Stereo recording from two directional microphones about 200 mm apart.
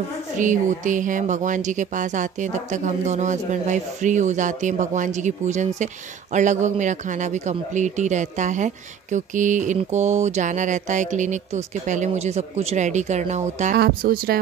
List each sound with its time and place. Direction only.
0.4 s a man's voice: 40° right (ahead or behind)
13.7 s speech: 50° right (ahead or behind)